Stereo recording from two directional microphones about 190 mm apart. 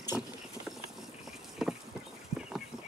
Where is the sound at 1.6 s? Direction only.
Centre (ahead or behind).